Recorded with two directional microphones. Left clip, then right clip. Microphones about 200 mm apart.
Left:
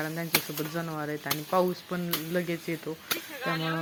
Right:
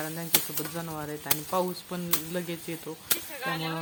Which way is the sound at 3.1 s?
40° left (ahead or behind).